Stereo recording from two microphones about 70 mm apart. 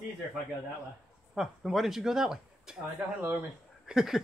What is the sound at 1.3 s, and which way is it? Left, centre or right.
Speech, centre.